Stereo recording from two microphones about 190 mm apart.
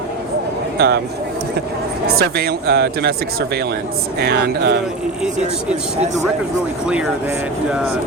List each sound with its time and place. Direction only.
0.8 s speech: 60° right (ahead or behind)
2.0 s speech: 55° right (ahead or behind)